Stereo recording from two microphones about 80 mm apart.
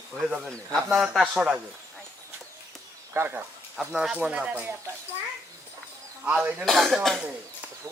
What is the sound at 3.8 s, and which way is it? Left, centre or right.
Speech, centre.